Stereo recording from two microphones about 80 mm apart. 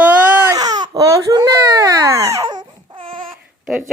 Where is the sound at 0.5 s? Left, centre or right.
Right.